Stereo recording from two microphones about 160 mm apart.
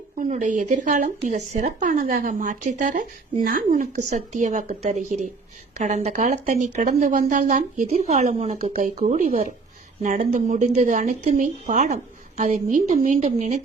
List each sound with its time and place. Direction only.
0.2 s speech: 55° right (ahead or behind)